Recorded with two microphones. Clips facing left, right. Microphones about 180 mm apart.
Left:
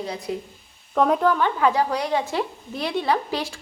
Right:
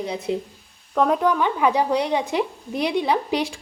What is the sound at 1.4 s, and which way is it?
Speech, 15° right (ahead or behind).